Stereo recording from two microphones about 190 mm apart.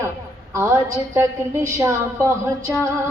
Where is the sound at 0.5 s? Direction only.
15° right (ahead or behind).